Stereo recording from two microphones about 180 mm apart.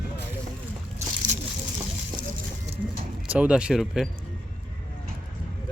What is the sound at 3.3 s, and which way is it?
Speech, 5° right (ahead or behind).